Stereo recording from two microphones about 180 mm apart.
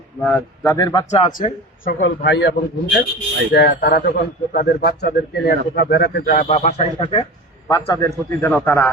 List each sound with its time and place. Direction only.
0.2 s speech: 10° left (ahead or behind)
1.1 s speech: 45° left (ahead or behind)
2.0 s a man's voice: 75° left (ahead or behind); by 7.3 s 35° left (ahead or behind)
7.7 s speech: 15° left (ahead or behind)